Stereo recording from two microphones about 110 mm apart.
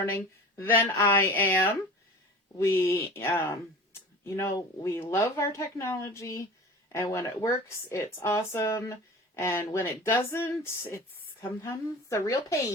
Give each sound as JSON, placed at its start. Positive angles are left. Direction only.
{"t": 0.0, "sound": "speech", "side_deg": 20}